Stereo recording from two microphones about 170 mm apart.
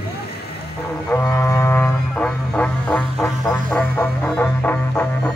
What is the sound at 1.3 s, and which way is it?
Music, 15° left (ahead or behind).